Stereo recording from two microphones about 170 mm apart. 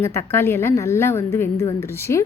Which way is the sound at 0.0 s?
15° left (ahead or behind).